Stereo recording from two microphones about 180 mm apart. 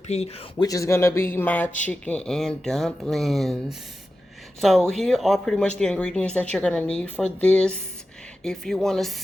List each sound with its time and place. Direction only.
0.1 s speech: 40° left (ahead or behind)
0.5 s speech: 20° left (ahead or behind); by 9.1 s centre (ahead or behind)